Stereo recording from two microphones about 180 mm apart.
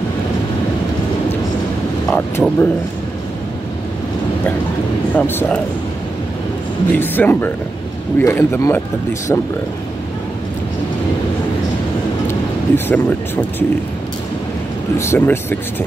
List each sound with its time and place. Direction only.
2.0 s speech: 5° left (ahead or behind)
5.1 s speech: 10° left (ahead or behind)
6.9 s speech: 10° left (ahead or behind)
12.3 s a sound: 10° left (ahead or behind)
15.0 s speech: 10° left (ahead or behind)